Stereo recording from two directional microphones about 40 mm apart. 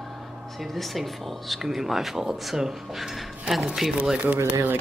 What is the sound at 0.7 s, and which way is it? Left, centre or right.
Speech, centre.